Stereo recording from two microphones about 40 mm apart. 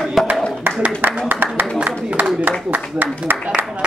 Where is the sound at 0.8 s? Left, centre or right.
Right.